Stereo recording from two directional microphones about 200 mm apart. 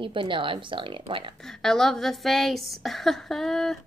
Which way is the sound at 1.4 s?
Centre (ahead or behind).